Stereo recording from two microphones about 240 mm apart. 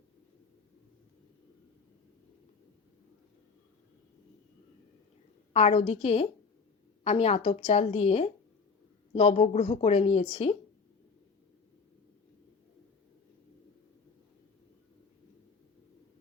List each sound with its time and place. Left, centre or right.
5.5 s speech: left